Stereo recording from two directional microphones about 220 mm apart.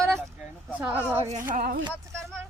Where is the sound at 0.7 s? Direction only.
5° right (ahead or behind).